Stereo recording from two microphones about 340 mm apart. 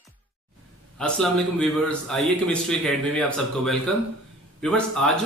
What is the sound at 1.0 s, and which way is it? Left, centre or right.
A man's voice, centre.